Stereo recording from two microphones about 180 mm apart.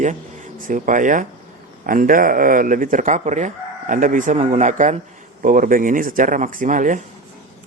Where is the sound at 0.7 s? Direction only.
45° right (ahead or behind).